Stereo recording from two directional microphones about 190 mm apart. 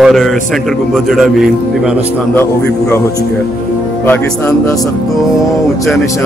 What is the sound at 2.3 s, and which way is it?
Speech, 10° left (ahead or behind).